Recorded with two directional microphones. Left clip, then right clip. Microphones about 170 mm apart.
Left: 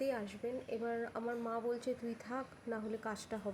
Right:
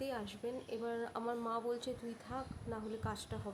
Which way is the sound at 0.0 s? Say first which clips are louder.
Left 3 dB; 10° left (ahead or behind).